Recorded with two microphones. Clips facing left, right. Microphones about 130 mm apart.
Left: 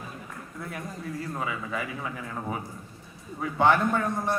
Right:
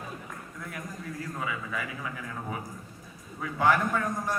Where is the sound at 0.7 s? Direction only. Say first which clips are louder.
Left 3 dB; 30° left (ahead or behind).